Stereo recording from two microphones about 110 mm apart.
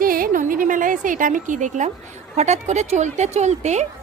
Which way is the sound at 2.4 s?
90° right.